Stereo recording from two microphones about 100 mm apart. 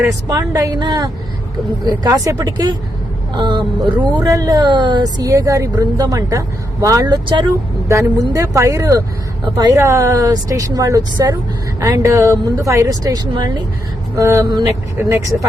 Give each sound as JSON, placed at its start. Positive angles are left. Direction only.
{"t": 0.1, "sound": "a woman's voice", "side_deg": -35}
{"t": 0.8, "sound": "a woman's voice", "side_deg": -45}
{"t": 3.3, "sound": "speech", "side_deg": -50}
{"t": 4.2, "sound": "a woman's voice", "side_deg": -35}
{"t": 7.9, "sound": "a woman's voice", "side_deg": -30}
{"t": 13.3, "sound": "speech", "side_deg": -50}
{"t": 14.2, "sound": "speech", "side_deg": -30}